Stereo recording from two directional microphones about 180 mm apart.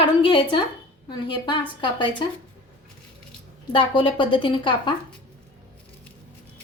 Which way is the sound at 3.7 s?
25° left (ahead or behind).